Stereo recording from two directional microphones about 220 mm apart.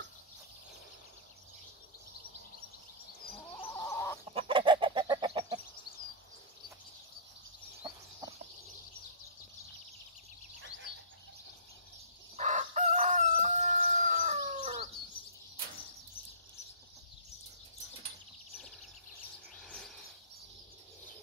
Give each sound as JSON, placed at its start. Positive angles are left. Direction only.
{"t": 3.7, "sound": "chicken", "side_deg": 10}
{"t": 4.3, "sound": "chicken", "side_deg": -25}
{"t": 7.8, "sound": "chicken", "side_deg": -20}
{"t": 12.4, "sound": "chicken", "side_deg": -35}